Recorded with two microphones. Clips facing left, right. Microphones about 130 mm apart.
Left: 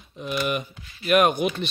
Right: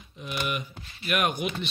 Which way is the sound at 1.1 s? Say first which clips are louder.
Left 8 dB; 35° left (ahead or behind).